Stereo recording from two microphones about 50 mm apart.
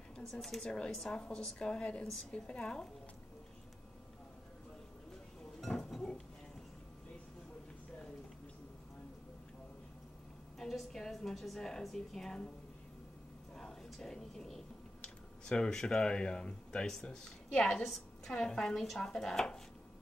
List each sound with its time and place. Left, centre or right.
0.1 s speech: centre
5.6 s chink: centre
10.6 s a woman's voice: centre
13.8 s a sound: centre
15.4 s speech: centre
17.8 s a woman's voice: centre